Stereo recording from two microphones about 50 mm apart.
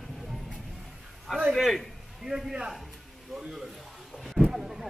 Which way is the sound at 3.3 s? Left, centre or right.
Centre.